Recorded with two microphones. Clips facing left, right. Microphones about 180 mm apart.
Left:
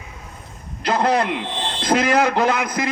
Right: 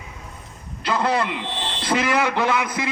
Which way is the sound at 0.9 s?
40° left (ahead or behind).